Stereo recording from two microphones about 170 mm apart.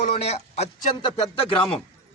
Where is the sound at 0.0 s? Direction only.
40° left (ahead or behind).